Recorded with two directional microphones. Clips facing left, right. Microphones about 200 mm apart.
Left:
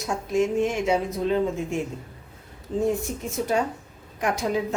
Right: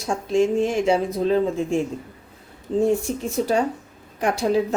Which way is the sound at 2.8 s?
30° right (ahead or behind).